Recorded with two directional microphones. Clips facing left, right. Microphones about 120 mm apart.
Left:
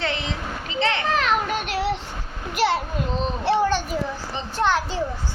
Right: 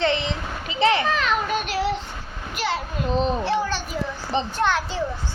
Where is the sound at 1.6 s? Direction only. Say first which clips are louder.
Right 1 dB; 65° left (ahead or behind).